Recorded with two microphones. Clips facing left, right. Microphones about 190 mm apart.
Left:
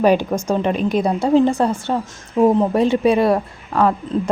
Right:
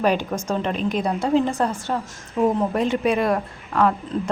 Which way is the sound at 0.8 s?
40° left (ahead or behind).